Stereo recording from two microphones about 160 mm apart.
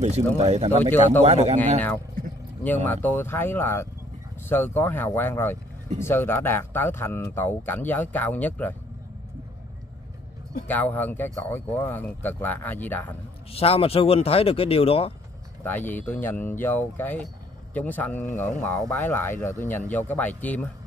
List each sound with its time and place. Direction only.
0.4 s speech: 45° right (ahead or behind)
2.6 s speech: 10° left (ahead or behind)
10.7 s speech: 10° left (ahead or behind)
13.5 s speech: 35° left (ahead or behind)
15.6 s speech: 10° left (ahead or behind)